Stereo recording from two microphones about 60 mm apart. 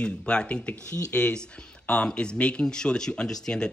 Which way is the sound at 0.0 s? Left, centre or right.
Centre.